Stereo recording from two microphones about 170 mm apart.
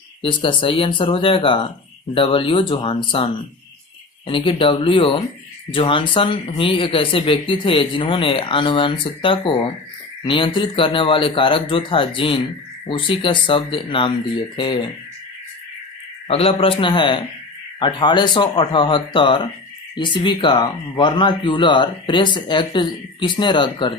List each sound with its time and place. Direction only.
0.2 s speech: 30° left (ahead or behind)
4.3 s speech: 30° left (ahead or behind)
16.3 s speech: 35° left (ahead or behind)